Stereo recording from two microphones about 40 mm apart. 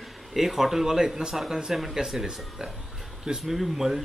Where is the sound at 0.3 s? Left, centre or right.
Centre.